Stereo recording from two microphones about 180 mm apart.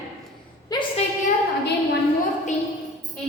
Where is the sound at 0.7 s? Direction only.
25° left (ahead or behind).